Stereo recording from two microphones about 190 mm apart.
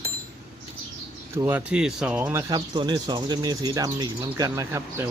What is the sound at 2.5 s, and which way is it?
Speech, 25° right (ahead or behind).